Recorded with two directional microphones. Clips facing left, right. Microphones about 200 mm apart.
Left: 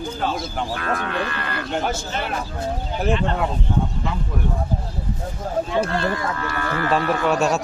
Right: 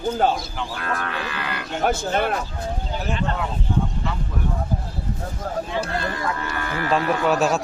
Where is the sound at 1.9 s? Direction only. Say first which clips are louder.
Right 5 dB; 55° right (ahead or behind).